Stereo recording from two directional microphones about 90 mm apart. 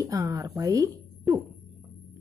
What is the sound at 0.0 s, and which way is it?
A woman's voice, 40° right (ahead or behind).